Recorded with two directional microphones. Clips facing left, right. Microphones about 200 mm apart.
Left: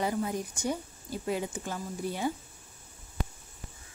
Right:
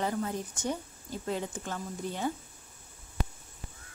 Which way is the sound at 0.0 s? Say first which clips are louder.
Left 1 dB; 10° left (ahead or behind).